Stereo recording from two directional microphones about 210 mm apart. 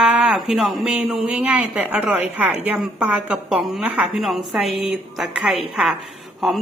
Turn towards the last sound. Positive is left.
turn(degrees=0)  # may be behind; listen again after turning